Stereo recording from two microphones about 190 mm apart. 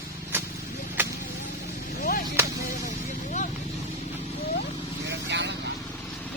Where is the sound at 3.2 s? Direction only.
40° left (ahead or behind).